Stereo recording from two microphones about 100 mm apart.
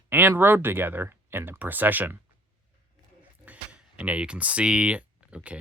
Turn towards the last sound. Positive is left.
turn(degrees=-10)  # may be behind; listen again after turning